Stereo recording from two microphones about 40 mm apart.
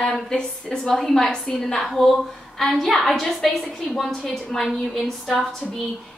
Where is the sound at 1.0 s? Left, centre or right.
Centre.